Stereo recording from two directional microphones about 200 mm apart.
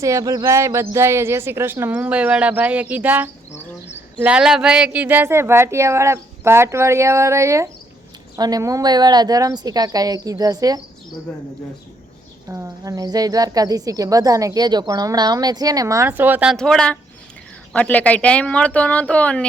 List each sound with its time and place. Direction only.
0.0 s a woman's voice: 15° right (ahead or behind)
12.5 s a woman's voice: 15° right (ahead or behind); by 19.5 s 5° left (ahead or behind)